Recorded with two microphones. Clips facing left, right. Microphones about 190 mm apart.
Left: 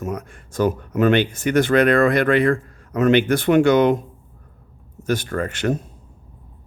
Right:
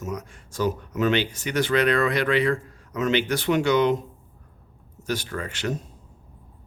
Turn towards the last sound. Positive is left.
turn(degrees=50)  # may be behind; listen again after turning